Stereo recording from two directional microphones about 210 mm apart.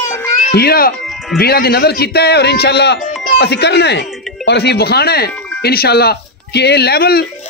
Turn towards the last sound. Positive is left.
turn(degrees=50)  # may be behind; listen again after turning